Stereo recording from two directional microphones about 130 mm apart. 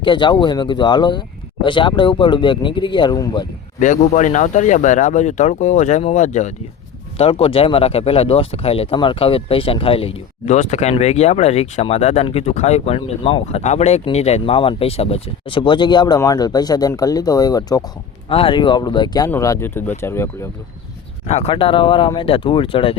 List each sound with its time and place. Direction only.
0.0 s speech: 35° left (ahead or behind)
3.8 s speech: 70° left (ahead or behind)
7.2 s speech: 45° left (ahead or behind); by 17.8 s 30° left (ahead or behind)
18.3 s speech: 45° left (ahead or behind)
19.3 s speech: 20° left (ahead or behind)
21.2 s speech: 55° left (ahead or behind)
21.5 s speech: 40° left (ahead or behind)